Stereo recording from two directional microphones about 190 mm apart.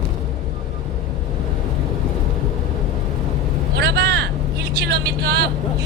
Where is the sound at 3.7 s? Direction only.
60° right (ahead or behind).